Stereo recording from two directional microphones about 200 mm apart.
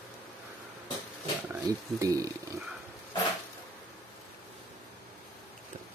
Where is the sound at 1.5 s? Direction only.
15° right (ahead or behind).